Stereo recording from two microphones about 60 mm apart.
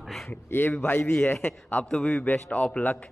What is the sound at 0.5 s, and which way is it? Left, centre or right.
A man's voice, left.